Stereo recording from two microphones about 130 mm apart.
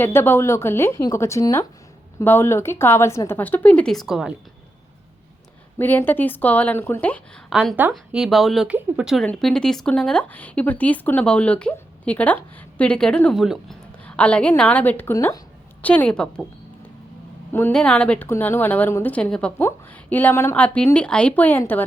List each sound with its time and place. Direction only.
0.0 s speech: 15° left (ahead or behind); by 4.4 s 5° right (ahead or behind)
5.8 s speech: 15° left (ahead or behind)
7.5 s speech: 5° right (ahead or behind)
9.2 s speech: 5° left (ahead or behind)
14.0 s speech: 10° left (ahead or behind)
17.5 s speech: 10° left (ahead or behind)